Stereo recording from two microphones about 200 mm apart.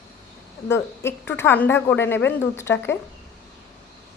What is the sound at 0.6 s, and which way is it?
Speech, 10° left (ahead or behind).